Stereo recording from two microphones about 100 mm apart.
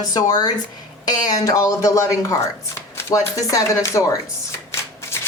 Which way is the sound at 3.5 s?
30° left (ahead or behind).